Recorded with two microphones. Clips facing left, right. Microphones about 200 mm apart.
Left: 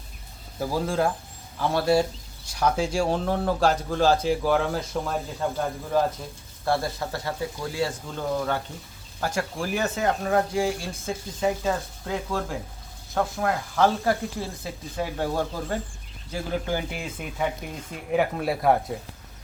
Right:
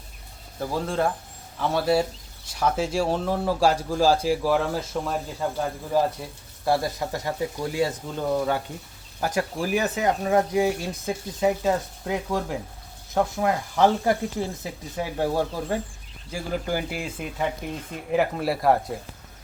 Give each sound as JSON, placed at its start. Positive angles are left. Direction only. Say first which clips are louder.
{"t": 0.6, "sound": "speech", "louder": "left 1 dB", "side_deg": 0}
{"t": 6.7, "sound": "speech", "louder": "right 2 dB", "side_deg": -15}